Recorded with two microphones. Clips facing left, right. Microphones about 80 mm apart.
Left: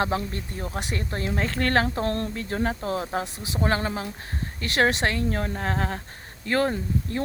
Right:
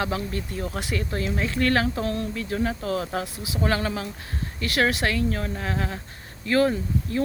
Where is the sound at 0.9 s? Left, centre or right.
Left.